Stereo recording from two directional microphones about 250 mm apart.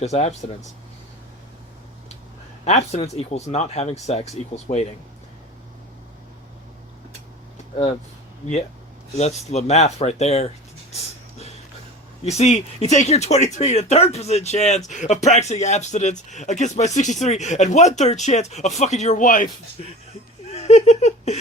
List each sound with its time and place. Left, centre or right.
0.0 s speech: left
2.6 s speech: left
9.1 s speech: left
10.9 s a sound: left
12.2 s speech: left
20.5 s giggle: left